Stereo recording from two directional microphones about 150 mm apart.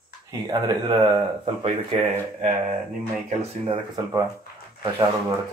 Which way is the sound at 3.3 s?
35° right (ahead or behind).